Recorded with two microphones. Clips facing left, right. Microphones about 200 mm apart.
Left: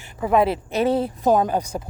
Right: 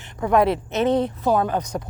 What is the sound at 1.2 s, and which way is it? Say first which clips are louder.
Speech: left 2 dB; 15° left (ahead or behind).